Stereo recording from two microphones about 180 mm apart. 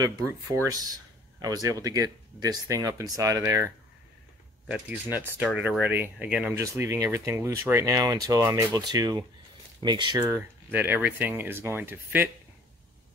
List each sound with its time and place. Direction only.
0.0 s speech: 15° right (ahead or behind)